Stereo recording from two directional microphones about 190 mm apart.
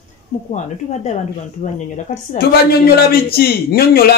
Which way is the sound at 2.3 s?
55° left (ahead or behind).